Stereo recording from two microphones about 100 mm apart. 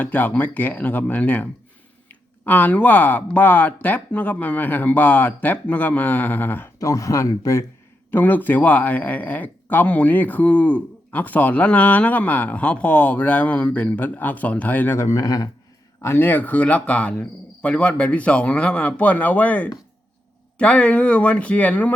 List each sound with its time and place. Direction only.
0.0 s speech: 15° left (ahead or behind)
6.7 s speech: 35° left (ahead or behind)
8.1 s speech: 15° left (ahead or behind); by 15.4 s 35° left (ahead or behind)
16.0 s speech: 25° left (ahead or behind)